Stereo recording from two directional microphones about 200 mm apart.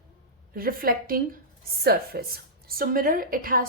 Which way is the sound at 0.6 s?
45° right (ahead or behind).